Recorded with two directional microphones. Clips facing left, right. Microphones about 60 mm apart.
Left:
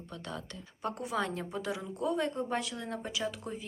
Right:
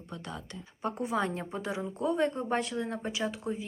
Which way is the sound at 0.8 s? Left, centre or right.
Right.